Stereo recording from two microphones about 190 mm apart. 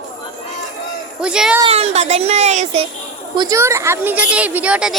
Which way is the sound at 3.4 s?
15° right (ahead or behind).